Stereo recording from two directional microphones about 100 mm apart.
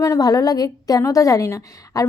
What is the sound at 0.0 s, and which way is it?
A woman's voice, 35° left (ahead or behind).